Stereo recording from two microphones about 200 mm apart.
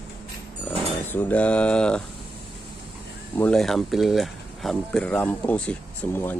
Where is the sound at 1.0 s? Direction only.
10° left (ahead or behind).